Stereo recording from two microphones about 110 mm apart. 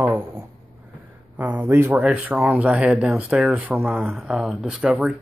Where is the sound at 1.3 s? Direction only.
15° right (ahead or behind).